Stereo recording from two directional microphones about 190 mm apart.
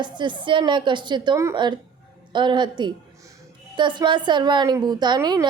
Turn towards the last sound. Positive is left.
turn(degrees=-20)  # may be behind; listen again after turning